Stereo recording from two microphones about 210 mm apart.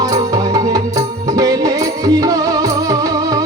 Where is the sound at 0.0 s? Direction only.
15° right (ahead or behind).